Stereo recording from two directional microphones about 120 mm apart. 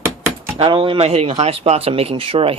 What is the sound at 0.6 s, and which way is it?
Speech, 50° right (ahead or behind).